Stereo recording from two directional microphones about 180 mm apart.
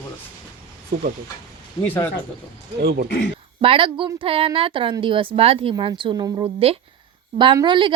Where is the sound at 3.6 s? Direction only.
30° right (ahead or behind).